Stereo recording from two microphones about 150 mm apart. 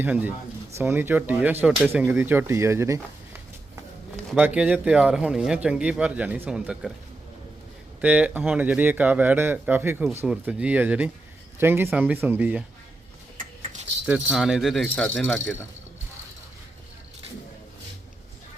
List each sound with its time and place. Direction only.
0.0 s a man's voice: 10° right (ahead or behind)
4.3 s a man's voice: 10° right (ahead or behind)
8.0 s a man's voice: 10° right (ahead or behind)
14.1 s speech: centre (ahead or behind)